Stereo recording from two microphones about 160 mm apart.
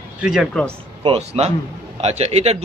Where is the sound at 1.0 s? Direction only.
40° right (ahead or behind).